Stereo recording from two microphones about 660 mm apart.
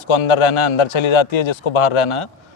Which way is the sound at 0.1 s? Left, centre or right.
Left.